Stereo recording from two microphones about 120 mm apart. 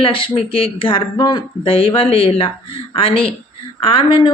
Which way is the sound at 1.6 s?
50° left (ahead or behind).